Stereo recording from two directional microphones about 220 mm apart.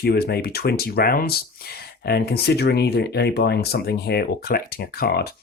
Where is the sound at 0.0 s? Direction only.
45° left (ahead or behind).